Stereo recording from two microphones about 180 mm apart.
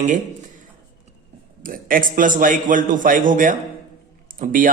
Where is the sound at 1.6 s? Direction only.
50° right (ahead or behind).